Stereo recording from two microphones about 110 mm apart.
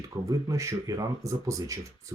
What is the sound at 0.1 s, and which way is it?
Speech, 30° right (ahead or behind).